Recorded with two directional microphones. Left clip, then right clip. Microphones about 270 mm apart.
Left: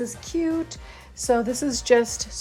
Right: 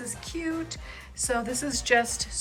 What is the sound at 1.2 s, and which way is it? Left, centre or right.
A woman's voice, left.